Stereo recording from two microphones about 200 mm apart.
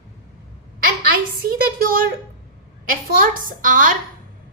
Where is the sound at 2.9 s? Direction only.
45° right (ahead or behind).